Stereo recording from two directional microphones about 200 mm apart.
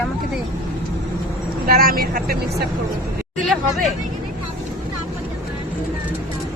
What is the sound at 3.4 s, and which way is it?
Speech, centre (ahead or behind).